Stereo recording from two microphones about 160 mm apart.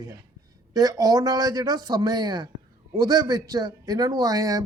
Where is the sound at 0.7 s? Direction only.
25° right (ahead or behind).